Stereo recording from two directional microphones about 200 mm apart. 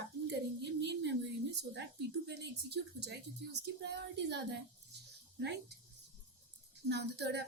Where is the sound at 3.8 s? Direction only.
60° right (ahead or behind).